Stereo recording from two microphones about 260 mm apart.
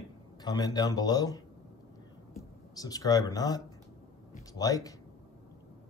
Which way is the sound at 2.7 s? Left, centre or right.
Centre.